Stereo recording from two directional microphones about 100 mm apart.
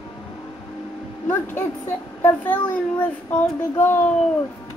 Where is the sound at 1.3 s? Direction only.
25° left (ahead or behind).